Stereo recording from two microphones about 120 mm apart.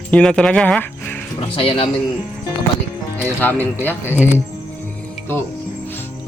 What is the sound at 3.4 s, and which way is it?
Speech, 15° left (ahead or behind).